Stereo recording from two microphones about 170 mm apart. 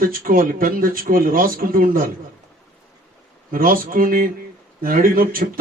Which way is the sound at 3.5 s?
55° right (ahead or behind).